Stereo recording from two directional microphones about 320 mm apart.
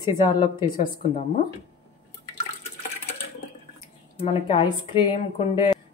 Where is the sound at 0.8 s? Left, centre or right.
Left.